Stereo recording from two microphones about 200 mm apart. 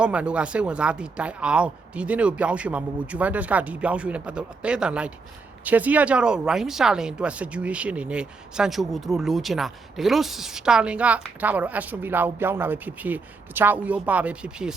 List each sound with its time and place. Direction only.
0.0 s speech: 5° right (ahead or behind)